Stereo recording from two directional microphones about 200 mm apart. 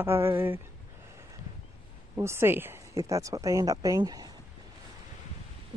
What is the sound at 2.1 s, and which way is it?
A woman's voice, 10° right (ahead or behind).